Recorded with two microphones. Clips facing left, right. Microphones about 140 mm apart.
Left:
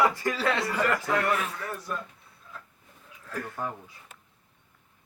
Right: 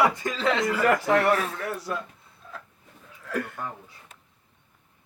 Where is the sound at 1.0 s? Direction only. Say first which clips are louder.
Right 5 dB; 80° right.